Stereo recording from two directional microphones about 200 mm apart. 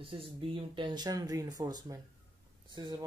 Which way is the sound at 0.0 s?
25° right (ahead or behind).